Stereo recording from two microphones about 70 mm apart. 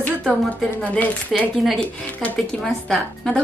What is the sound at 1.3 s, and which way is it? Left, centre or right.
A woman's voice, centre.